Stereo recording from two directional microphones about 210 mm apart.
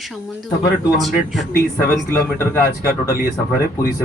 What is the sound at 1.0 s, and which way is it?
Speech, centre (ahead or behind).